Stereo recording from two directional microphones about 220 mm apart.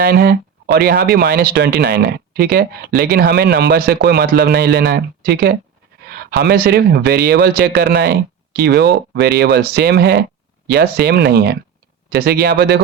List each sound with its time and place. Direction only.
0.0 s speech: 45° right (ahead or behind)